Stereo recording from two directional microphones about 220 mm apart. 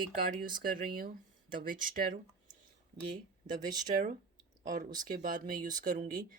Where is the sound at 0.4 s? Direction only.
40° right (ahead or behind).